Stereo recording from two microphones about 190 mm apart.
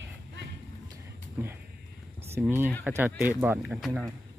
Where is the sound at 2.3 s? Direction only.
10° right (ahead or behind).